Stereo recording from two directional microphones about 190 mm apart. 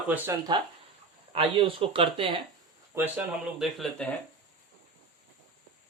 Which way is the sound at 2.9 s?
10° right (ahead or behind).